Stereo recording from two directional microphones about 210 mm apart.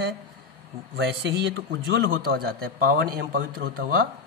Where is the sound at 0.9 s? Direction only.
55° right (ahead or behind).